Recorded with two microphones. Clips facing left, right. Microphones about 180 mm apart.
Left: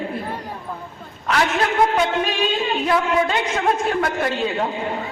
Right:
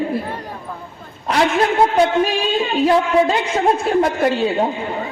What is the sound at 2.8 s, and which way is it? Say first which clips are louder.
A man's voice: right 5 dB; 30° right (ahead or behind).